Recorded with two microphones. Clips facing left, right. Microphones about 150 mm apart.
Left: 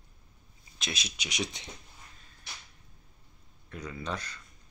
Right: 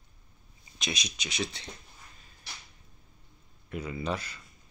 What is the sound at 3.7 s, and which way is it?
Speech, 10° right (ahead or behind).